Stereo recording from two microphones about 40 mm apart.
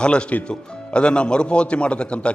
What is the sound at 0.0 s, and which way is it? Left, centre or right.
A man's voice, left.